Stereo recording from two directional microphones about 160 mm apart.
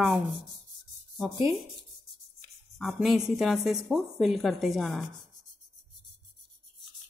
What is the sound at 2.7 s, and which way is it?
A woman's voice, centre (ahead or behind).